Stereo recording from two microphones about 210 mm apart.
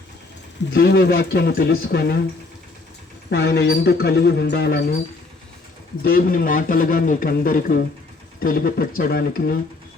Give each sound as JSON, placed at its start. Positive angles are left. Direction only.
{"t": 0.7, "sound": "speech", "side_deg": 50}
{"t": 3.2, "sound": "speech", "side_deg": 50}
{"t": 6.0, "sound": "a man's voice", "side_deg": 45}